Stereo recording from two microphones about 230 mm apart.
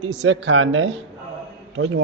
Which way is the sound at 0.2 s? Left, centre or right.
Right.